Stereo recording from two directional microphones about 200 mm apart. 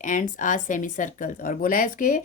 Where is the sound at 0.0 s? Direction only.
40° left (ahead or behind).